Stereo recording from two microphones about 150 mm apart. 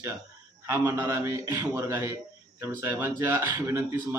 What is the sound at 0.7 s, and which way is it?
A man's voice, 15° right (ahead or behind).